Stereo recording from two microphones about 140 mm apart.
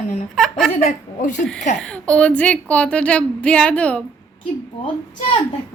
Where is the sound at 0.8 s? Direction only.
65° left (ahead or behind).